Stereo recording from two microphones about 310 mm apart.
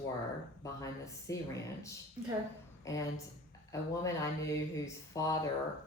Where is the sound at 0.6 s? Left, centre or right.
Centre.